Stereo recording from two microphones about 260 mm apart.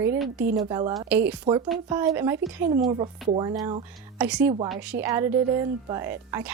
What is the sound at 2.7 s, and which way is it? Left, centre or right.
A woman's voice, right.